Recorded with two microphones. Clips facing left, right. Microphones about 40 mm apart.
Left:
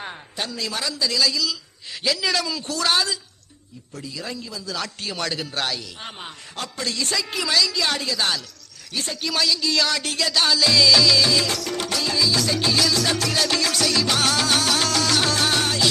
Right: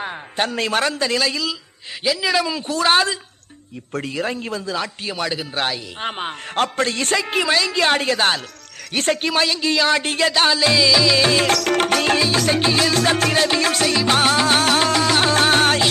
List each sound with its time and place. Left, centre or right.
0.3 s a woman's voice: right
2.0 s speech: centre; by 3.2 s right
3.9 s a woman's voice: right
4.7 s speech: right
5.1 s speech: centre
6.0 s a woman's voice: right
9.3 s music: right
10.8 s music: right
11.5 s music: right